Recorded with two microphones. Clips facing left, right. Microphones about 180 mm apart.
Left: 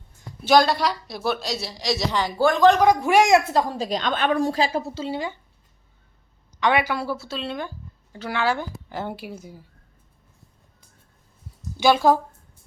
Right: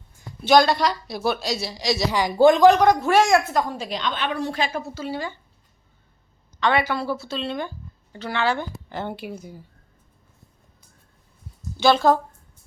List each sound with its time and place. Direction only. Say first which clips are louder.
0.4 s a woman's voice: right 1 dB; 5° left (ahead or behind)
2.1 s speech: right 6 dB; 15° right (ahead or behind)
2.8 s a woman's voice: even; 10° left (ahead or behind)
6.6 s a woman's voice: even; 15° left (ahead or behind)
11.8 s a woman's voice: even; 10° left (ahead or behind)